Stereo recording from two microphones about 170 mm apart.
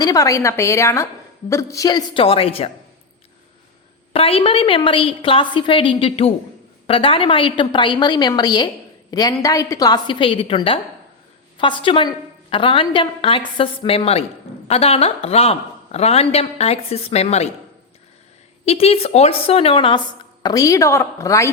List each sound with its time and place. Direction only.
0.0 s a woman's voice: 20° left (ahead or behind)
4.1 s a woman's voice: 35° left (ahead or behind)
18.6 s a woman's voice: 35° left (ahead or behind)
20.4 s a woman's voice: 20° left (ahead or behind)